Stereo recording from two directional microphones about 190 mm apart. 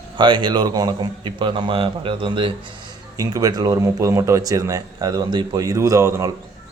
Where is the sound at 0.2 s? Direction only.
25° right (ahead or behind).